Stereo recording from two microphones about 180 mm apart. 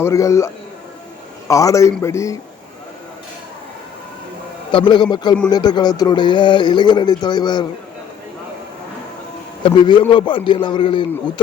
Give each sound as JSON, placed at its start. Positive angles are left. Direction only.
{"t": 0.0, "sound": "a man's voice", "side_deg": 15}
{"t": 4.7, "sound": "speech", "side_deg": 25}
{"t": 9.6, "sound": "speech", "side_deg": 25}